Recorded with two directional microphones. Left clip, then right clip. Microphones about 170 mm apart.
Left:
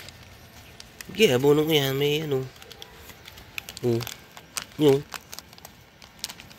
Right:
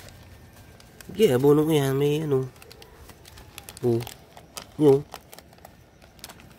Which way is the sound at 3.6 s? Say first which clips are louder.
Right 1 dB; 90° right.